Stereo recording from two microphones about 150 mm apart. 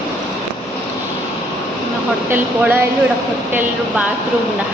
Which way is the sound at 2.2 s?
10° right (ahead or behind).